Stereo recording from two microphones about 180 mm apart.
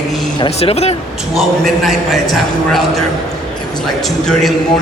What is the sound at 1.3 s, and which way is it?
A man's voice, centre (ahead or behind).